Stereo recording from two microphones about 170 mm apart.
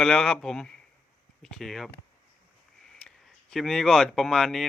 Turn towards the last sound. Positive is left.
turn(degrees=0)  # may be behind; listen again after turning